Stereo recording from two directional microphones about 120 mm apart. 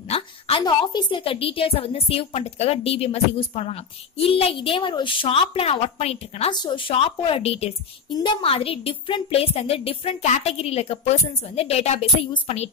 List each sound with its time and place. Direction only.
0.1 s a sound: 50° left (ahead or behind)
0.7 s a woman's voice: 40° left (ahead or behind); by 6.5 s 60° left (ahead or behind)
6.5 s a woman's voice: 40° left (ahead or behind); by 7.7 s 55° left (ahead or behind)
8.1 s a woman's voice: 40° left (ahead or behind); by 12.6 s 65° left (ahead or behind)